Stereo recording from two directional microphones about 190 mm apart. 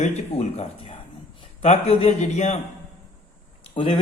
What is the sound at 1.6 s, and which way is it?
Speech, 35° left (ahead or behind).